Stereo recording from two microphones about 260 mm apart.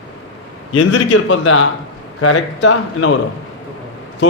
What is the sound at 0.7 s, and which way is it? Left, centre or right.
Speech, left.